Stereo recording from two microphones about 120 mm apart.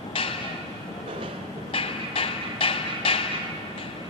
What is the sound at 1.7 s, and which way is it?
Music, 50° left (ahead or behind).